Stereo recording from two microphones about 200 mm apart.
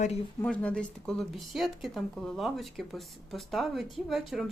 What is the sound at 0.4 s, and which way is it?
Speech, 5° left (ahead or behind).